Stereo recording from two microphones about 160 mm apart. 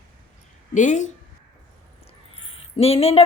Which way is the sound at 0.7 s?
50° left (ahead or behind).